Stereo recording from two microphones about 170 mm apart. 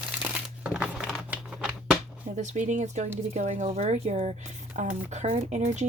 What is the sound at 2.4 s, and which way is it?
Speech, 45° right (ahead or behind).